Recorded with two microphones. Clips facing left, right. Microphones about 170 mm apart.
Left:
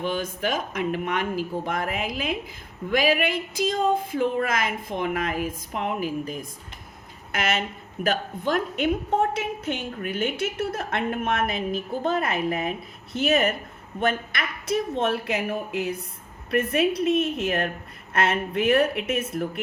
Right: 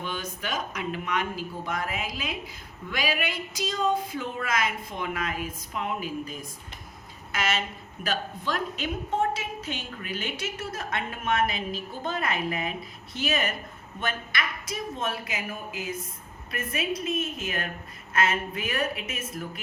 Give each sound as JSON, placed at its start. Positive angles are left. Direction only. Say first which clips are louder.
{"t": 0.0, "sound": "a woman's voice", "louder": "left 7 dB", "side_deg": 50}